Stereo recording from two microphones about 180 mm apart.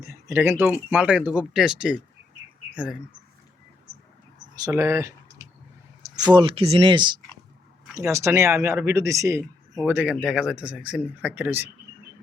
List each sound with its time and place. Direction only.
0.0 s speech: 15° right (ahead or behind)
4.5 s a sound: 20° right (ahead or behind)
6.2 s speech: 25° right (ahead or behind); by 11.7 s 10° right (ahead or behind)